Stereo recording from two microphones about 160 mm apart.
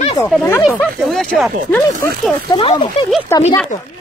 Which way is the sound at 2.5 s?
30° left (ahead or behind).